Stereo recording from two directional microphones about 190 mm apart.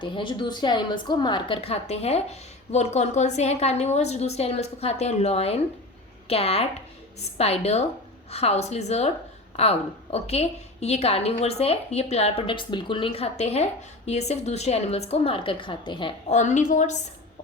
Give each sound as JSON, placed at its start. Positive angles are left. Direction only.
{"t": 0.0, "sound": "a woman's voice", "side_deg": 25}
{"t": 16.3, "sound": "a woman's voice", "side_deg": 40}